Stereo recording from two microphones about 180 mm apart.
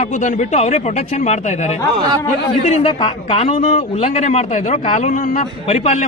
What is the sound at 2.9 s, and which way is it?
Speech, 30° left (ahead or behind).